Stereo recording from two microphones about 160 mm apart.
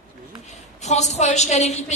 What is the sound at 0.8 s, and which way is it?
A woman's voice, 45° left (ahead or behind).